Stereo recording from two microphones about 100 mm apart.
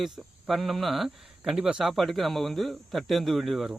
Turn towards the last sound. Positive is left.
turn(degrees=0)  # may be behind; listen again after turning